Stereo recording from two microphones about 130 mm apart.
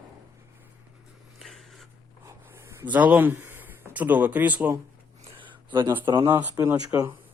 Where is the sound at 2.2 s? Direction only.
20° right (ahead or behind).